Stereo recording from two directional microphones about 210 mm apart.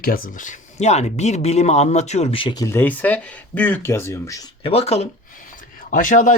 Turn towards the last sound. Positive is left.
turn(degrees=40)  # may be behind; listen again after turning